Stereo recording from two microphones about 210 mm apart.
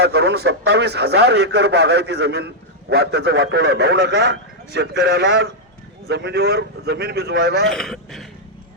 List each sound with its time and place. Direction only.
0.0 s a man's voice: 55° right (ahead or behind)
7.7 s speech: centre (ahead or behind)